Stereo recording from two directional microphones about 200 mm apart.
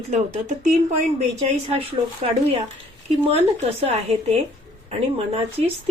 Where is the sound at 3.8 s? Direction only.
30° right (ahead or behind).